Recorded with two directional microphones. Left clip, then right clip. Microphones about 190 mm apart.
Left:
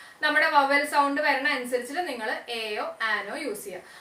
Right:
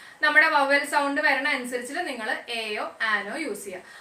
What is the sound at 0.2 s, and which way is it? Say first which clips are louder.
A woman's voice: right 2 dB; 10° right (ahead or behind).